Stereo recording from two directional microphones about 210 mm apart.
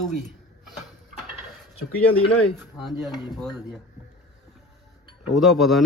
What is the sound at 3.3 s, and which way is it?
Speech, centre (ahead or behind).